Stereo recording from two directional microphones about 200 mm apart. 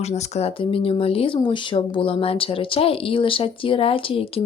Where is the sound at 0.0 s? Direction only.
30° left (ahead or behind).